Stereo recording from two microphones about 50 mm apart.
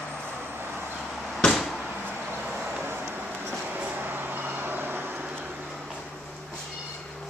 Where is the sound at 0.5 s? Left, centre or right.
Right.